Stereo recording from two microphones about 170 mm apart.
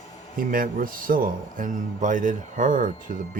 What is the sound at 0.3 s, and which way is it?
Speech, 55° right (ahead or behind).